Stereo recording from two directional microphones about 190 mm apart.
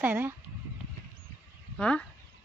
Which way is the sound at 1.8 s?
5° left (ahead or behind).